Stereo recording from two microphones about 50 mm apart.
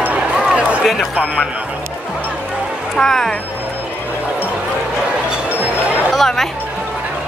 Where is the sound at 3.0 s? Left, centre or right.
Centre.